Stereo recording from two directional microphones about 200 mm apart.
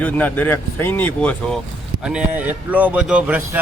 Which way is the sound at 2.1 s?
5° right (ahead or behind).